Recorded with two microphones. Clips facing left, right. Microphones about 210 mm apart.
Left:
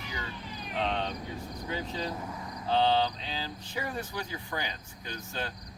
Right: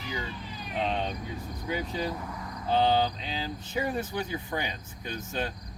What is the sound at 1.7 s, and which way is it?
Speech, 15° right (ahead or behind).